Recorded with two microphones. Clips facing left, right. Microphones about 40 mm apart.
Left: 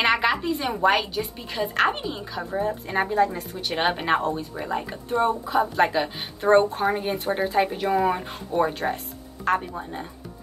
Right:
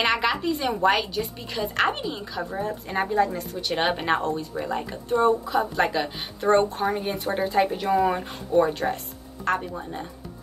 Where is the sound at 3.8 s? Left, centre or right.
Centre.